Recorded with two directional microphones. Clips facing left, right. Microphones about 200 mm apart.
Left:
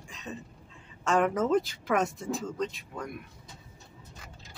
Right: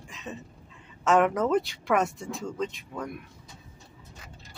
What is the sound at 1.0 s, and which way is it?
Speech, centre (ahead or behind).